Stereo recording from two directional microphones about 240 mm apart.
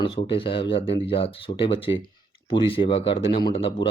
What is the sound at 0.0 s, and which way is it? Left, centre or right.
Speech, left.